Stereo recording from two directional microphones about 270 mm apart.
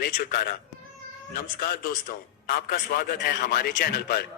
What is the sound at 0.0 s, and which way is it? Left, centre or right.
A man's voice, left.